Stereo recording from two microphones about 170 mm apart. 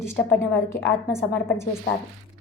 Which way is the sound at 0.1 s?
15° left (ahead or behind).